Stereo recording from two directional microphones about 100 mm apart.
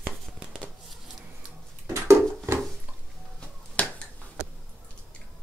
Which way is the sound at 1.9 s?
30° right (ahead or behind).